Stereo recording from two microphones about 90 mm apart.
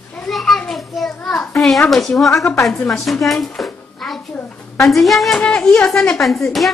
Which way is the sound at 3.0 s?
Centre (ahead or behind).